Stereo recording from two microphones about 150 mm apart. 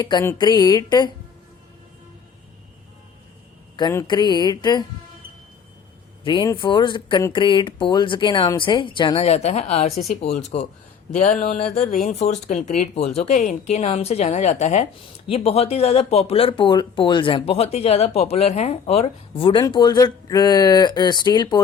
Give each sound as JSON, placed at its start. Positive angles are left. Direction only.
{"t": 0.0, "sound": "speech", "side_deg": 30}
{"t": 4.0, "sound": "speech", "side_deg": 30}
{"t": 6.2, "sound": "a woman's voice", "side_deg": 30}
{"t": 12.0, "sound": "a woman's voice", "side_deg": 45}